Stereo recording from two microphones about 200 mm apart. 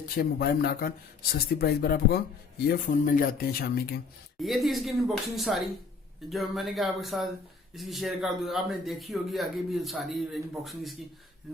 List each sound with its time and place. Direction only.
0.2 s speech: 50° left (ahead or behind)
4.4 s speech: centre (ahead or behind)